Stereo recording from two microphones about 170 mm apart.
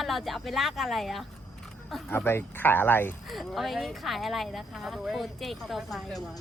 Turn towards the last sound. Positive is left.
turn(degrees=0)  # may be behind; listen again after turning